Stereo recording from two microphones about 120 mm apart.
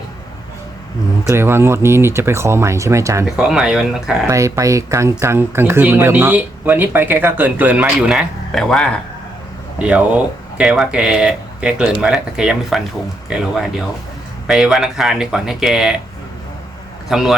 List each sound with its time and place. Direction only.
1.3 s speech: 20° right (ahead or behind)
3.2 s speech: 5° right (ahead or behind)
4.3 s speech: 25° right (ahead or behind); by 8.9 s 5° left (ahead or behind)
9.7 s speech: 10° right (ahead or behind)
17.1 s speech: centre (ahead or behind)